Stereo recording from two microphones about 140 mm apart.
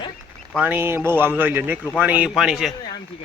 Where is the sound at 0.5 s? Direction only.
15° right (ahead or behind).